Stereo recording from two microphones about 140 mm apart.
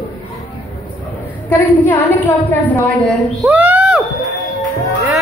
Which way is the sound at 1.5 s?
15° left (ahead or behind).